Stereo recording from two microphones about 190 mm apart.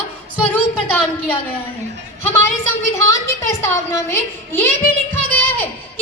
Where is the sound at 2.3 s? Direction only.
10° left (ahead or behind).